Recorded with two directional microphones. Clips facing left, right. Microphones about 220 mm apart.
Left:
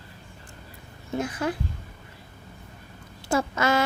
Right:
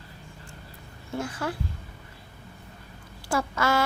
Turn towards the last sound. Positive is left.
turn(degrees=20)  # may be behind; listen again after turning